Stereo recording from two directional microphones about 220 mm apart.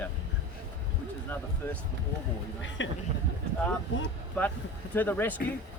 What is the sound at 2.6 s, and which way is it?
Speech, 55° left (ahead or behind).